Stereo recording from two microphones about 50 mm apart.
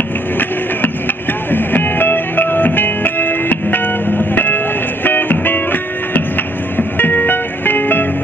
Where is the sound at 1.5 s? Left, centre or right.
Left.